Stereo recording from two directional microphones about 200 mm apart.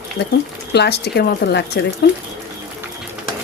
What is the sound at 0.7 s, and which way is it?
Speech, 55° left (ahead or behind).